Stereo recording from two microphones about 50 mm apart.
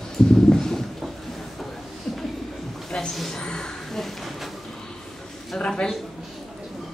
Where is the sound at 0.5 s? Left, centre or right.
Centre.